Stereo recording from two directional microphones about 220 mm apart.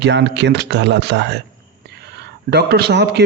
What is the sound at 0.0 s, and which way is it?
A man's voice, 50° right (ahead or behind).